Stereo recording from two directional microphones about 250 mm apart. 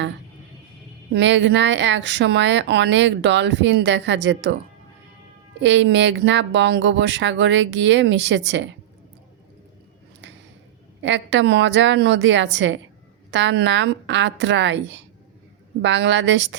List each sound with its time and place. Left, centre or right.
1.1 s speech: right
5.5 s speech: right
11.0 s speech: right